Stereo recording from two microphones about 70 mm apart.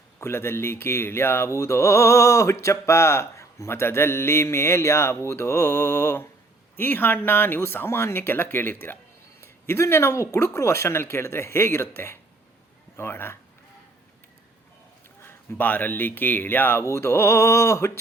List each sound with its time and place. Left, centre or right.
0.2 s speech: left
15.2 s speech: left